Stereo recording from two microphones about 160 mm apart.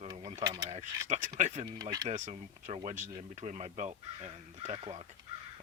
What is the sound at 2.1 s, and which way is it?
Speech, 45° right (ahead or behind).